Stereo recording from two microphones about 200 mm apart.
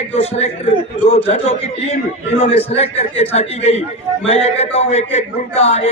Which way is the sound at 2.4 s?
30° left (ahead or behind).